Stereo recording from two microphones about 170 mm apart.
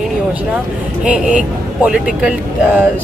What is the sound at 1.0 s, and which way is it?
Speech, 5° right (ahead or behind).